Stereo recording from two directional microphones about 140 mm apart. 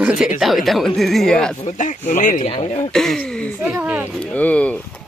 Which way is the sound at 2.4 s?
45° left (ahead or behind).